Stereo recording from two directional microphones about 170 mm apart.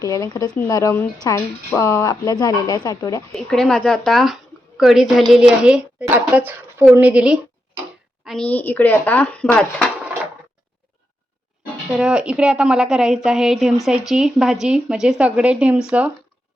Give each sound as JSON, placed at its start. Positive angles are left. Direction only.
{"t": 0.0, "sound": "speech", "side_deg": 20}
{"t": 3.3, "sound": "a woman's voice", "side_deg": 5}
{"t": 8.2, "sound": "a sound", "side_deg": 0}
{"t": 8.4, "sound": "speech", "side_deg": 10}
{"t": 11.9, "sound": "a woman's voice", "side_deg": -5}